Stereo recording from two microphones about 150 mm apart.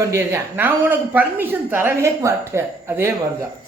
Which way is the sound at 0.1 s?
15° right (ahead or behind).